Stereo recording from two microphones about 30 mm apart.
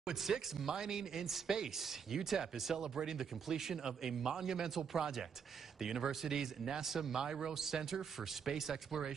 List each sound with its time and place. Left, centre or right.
0.1 s speech: centre